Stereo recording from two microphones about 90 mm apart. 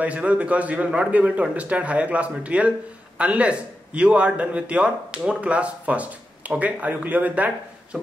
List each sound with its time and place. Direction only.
0.0 s speech: 15° right (ahead or behind)